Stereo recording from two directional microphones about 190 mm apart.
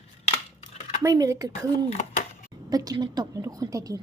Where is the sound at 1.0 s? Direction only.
15° right (ahead or behind).